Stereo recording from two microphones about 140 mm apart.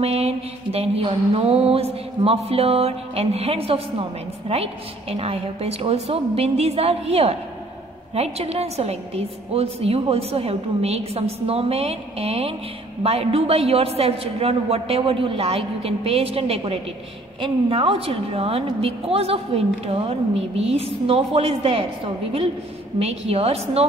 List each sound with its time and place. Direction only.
0.0 s a woman's voice: 50° right (ahead or behind)